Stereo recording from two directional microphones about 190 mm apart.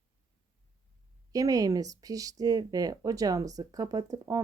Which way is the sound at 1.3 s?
20° right (ahead or behind).